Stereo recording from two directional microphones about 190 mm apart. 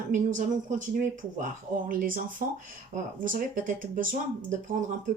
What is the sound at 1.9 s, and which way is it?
Speech, 45° right (ahead or behind).